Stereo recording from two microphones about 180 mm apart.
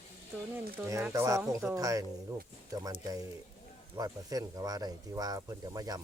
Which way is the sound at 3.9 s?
20° right (ahead or behind).